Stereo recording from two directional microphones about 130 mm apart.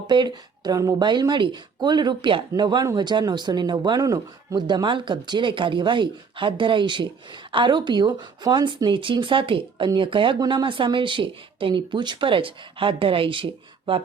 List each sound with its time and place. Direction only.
0.1 s speech: 35° right (ahead or behind)